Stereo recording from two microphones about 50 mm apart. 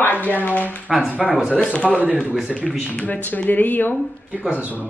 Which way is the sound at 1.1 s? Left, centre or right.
Right.